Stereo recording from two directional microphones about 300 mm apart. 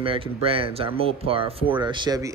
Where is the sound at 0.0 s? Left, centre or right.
Centre.